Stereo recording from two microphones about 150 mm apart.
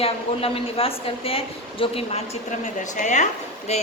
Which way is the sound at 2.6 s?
55° left (ahead or behind).